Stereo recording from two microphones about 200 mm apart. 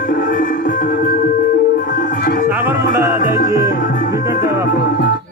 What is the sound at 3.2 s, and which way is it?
Music, 40° left (ahead or behind).